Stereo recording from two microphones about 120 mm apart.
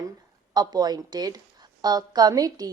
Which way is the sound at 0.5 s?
35° right (ahead or behind).